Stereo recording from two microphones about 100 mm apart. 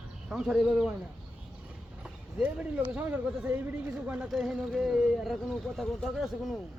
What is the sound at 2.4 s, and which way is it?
Speech, 10° right (ahead or behind).